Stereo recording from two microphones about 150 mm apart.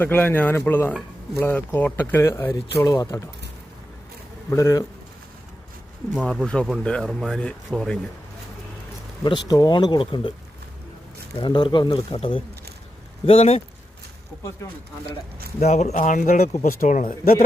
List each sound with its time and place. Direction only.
0.0 s speech: 10° left (ahead or behind)
4.4 s speech: 20° left (ahead or behind)
6.2 s speech: 5° left (ahead or behind)
9.2 s speech: 25° left (ahead or behind)
11.3 s speech: 30° left (ahead or behind)
15.6 s speech: 50° left (ahead or behind); by 17.3 s 65° left (ahead or behind)